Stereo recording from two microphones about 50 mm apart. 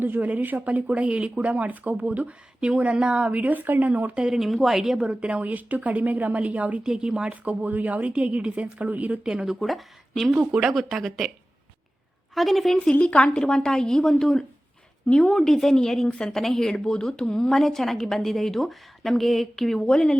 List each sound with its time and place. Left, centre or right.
0.0 s a woman's voice: right
4.2 s speech: centre
4.9 s speech: centre
5.3 s a woman's voice: right
6.8 s speech: centre
7.4 s a woman's voice: right
9.2 s speech: centre
9.6 s a woman's voice: centre
10.3 s speech: centre
10.7 s a woman's voice: centre
12.3 s a woman's voice: centre
12.8 s a woman's voice: left